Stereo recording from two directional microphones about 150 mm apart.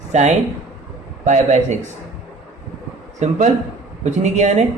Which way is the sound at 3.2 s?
50° right (ahead or behind).